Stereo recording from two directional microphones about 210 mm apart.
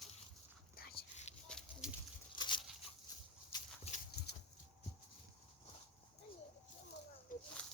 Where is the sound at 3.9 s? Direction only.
30° left (ahead or behind).